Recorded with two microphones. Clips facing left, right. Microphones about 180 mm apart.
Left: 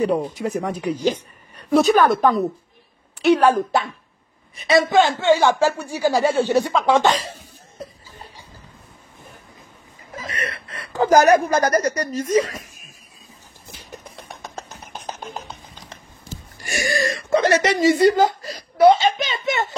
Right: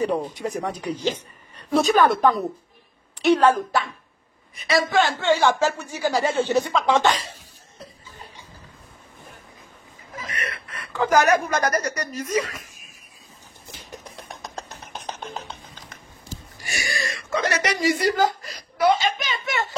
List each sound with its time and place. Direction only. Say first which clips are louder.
0.0 s a woman's voice: left 3 dB; 10° left (ahead or behind)
4.8 s speech: left 2 dB; 15° left (ahead or behind)
10.3 s a woman's voice: left 3 dB; 35° left (ahead or behind)
13.7 s music: left 1 dB; centre (ahead or behind)
16.6 s speech: left 8 dB; 45° left (ahead or behind); by 19.7 s 20° left (ahead or behind)